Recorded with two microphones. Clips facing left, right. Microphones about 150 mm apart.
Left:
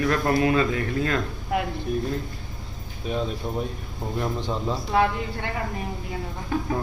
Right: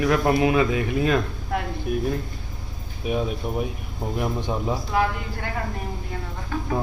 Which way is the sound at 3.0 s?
10° right (ahead or behind).